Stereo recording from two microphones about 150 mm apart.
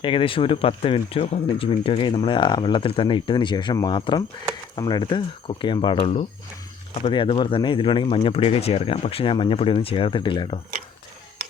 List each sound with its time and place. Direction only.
0.0 s speech: 35° left (ahead or behind)